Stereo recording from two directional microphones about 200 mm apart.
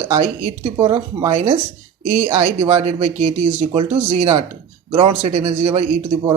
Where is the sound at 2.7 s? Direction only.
30° right (ahead or behind).